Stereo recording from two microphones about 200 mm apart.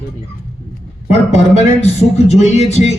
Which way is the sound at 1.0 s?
35° left (ahead or behind).